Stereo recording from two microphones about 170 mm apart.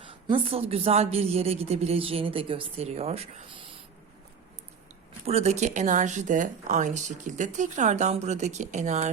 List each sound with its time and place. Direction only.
0.1 s a man's voice: 30° right (ahead or behind)
5.2 s speech: 40° right (ahead or behind)